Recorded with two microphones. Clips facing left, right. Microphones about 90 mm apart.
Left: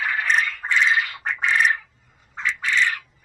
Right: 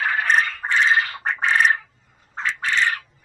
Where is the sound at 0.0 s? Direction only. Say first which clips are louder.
Right 2 dB; 35° right (ahead or behind).